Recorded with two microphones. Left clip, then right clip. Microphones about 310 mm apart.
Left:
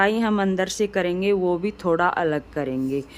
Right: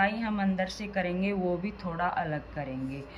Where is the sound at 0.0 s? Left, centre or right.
Centre.